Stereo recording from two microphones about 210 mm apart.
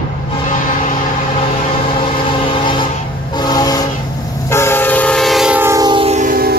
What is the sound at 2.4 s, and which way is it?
Vehicle, 25° left (ahead or behind).